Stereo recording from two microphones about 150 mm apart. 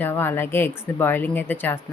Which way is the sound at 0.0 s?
15° left (ahead or behind).